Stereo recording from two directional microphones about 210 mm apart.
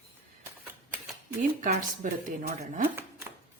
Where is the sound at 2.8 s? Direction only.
10° right (ahead or behind).